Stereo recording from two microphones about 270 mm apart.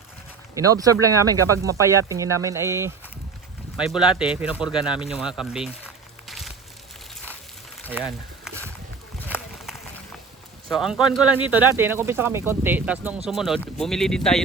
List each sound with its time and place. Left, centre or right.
0.5 s speech: centre
7.9 s a sound: centre
10.7 s speech: centre